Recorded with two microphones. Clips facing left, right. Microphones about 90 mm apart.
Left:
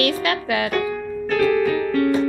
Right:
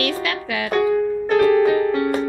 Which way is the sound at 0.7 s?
20° right (ahead or behind).